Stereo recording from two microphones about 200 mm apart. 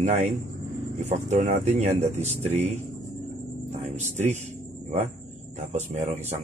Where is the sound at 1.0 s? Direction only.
35° right (ahead or behind).